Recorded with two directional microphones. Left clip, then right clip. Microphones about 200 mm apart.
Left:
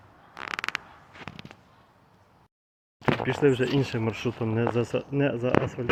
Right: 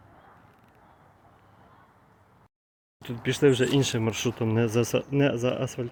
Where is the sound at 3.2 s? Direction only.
20° right (ahead or behind).